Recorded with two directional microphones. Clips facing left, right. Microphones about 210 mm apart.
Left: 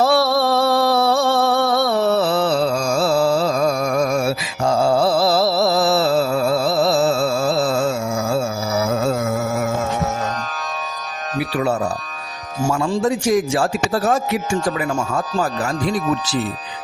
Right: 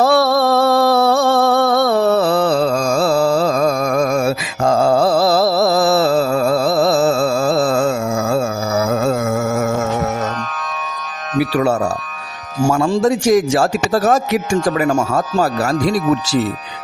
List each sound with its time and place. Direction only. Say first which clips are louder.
0.0 s a sound: right 3 dB; 50° right (ahead or behind)
2.7 s music: right 3 dB; 90° right
3.0 s music: right 1 dB; 50° right (ahead or behind)
4.6 s music: right 3 dB; 50° right (ahead or behind)
13.0 s a man's voice: right 4 dB; 85° right